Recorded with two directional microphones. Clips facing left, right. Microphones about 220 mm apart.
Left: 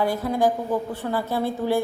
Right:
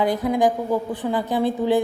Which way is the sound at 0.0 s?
15° right (ahead or behind).